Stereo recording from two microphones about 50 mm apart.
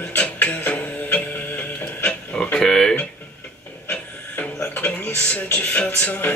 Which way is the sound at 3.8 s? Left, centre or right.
Left.